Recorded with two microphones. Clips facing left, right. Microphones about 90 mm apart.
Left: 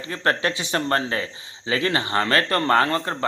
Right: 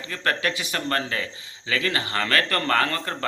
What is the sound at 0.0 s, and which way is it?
Speech, 30° left (ahead or behind).